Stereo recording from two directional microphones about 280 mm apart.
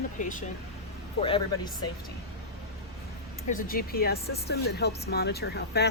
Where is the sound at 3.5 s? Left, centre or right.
Left.